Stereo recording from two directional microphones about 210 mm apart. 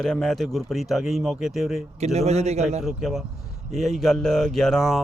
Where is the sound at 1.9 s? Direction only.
30° right (ahead or behind).